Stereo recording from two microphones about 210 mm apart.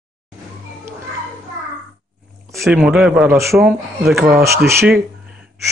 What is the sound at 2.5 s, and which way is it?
Speech, centre (ahead or behind).